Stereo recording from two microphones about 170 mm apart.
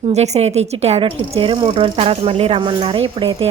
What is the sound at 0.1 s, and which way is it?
Speech, 40° right (ahead or behind).